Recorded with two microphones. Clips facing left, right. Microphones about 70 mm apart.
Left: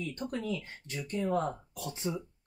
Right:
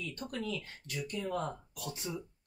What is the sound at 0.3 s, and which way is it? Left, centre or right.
Speech, left.